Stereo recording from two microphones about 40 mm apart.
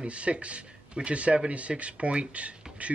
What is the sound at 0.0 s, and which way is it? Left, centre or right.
Speech, right.